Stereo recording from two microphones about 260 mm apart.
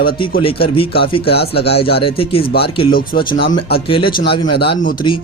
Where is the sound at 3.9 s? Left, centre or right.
Centre.